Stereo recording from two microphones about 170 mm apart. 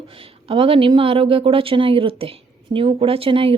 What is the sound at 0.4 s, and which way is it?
A woman's voice, 30° right (ahead or behind).